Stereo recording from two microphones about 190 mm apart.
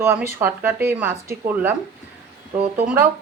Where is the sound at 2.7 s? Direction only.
10° right (ahead or behind).